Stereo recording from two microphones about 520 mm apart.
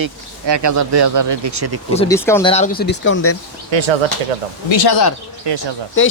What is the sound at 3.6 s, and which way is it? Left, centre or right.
Speech, right.